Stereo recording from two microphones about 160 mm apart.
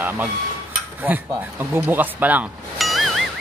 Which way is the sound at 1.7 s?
10° right (ahead or behind).